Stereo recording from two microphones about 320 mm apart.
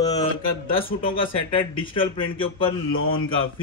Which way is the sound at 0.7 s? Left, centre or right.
Centre.